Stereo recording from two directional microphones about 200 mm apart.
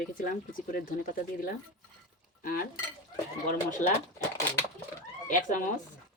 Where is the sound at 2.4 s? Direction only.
45° left (ahead or behind).